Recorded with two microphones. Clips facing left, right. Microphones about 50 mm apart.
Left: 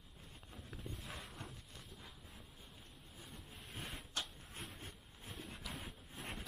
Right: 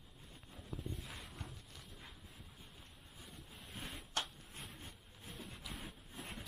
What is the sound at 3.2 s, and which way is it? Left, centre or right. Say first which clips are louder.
Vehicle: even; centre.